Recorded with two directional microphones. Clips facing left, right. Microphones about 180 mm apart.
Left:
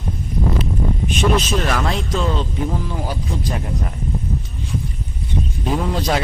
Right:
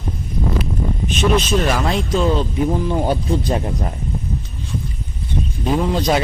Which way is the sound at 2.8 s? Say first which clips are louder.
Right 7 dB; 25° right (ahead or behind).